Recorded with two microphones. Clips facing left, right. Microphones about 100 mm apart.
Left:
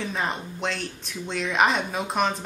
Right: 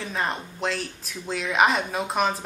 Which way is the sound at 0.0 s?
Centre (ahead or behind).